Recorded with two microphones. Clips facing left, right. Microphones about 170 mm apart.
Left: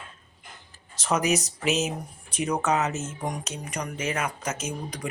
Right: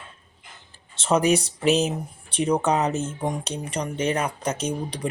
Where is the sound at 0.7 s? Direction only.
30° right (ahead or behind).